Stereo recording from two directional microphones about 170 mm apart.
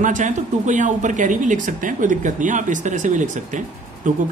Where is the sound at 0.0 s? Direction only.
50° right (ahead or behind).